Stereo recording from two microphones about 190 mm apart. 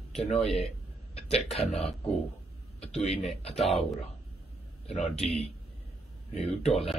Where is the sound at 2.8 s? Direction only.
35° left (ahead or behind).